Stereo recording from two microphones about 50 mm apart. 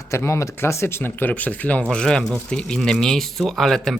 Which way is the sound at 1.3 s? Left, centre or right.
Left.